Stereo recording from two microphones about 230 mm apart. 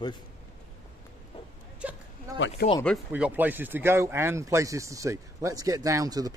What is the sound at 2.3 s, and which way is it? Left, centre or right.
Speech, left.